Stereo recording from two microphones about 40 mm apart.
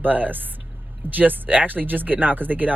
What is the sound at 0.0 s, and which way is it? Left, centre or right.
Speech, right.